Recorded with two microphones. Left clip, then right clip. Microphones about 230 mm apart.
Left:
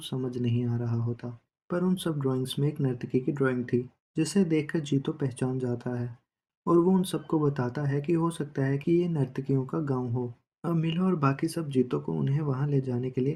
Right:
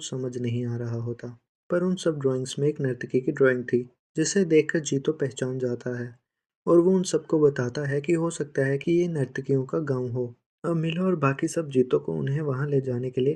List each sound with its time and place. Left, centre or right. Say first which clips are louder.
0.0 s speech: right 2 dB; centre